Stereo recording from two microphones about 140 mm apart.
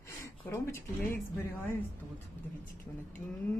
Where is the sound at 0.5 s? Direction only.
15° left (ahead or behind).